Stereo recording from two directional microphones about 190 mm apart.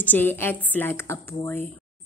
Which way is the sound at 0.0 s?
10° left (ahead or behind).